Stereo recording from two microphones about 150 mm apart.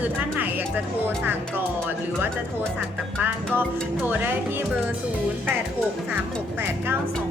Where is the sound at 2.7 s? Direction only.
10° right (ahead or behind).